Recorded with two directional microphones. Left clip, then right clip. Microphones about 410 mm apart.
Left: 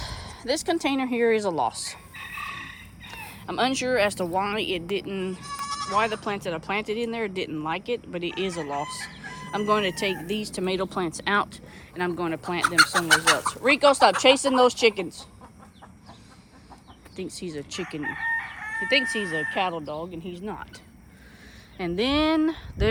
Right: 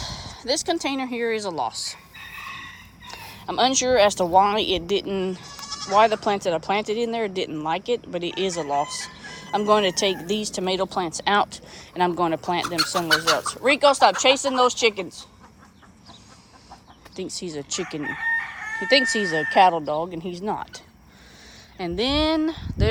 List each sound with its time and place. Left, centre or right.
0.0 s speech: centre
5.5 s bleat: centre
6.0 s speech: centre
17.2 s speech: centre
18.0 s chicken: right
18.9 s speech: centre